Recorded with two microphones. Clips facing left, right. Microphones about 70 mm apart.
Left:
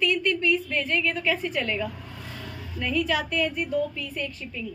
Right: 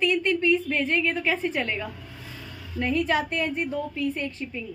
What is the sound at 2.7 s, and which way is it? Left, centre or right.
A woman's voice, right.